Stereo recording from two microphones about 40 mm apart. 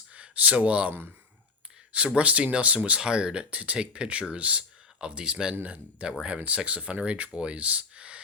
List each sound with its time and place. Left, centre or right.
0.1 s speech: right
2.1 s speech: right
3.0 s speech: right
5.6 s speech: right